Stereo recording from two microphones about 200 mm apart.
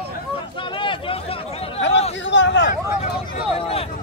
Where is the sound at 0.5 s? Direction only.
25° left (ahead or behind).